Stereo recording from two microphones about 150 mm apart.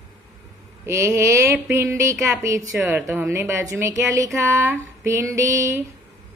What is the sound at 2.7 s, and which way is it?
Speech, 15° right (ahead or behind).